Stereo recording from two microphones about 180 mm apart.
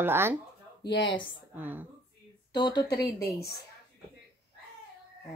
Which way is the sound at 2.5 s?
25° left (ahead or behind).